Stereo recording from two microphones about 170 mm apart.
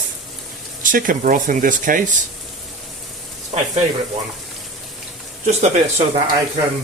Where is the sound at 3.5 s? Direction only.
40° right (ahead or behind).